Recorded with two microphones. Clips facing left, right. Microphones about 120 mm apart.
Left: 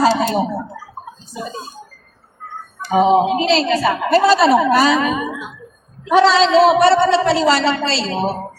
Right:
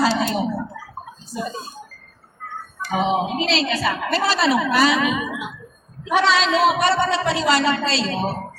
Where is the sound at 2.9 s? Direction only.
40° left (ahead or behind).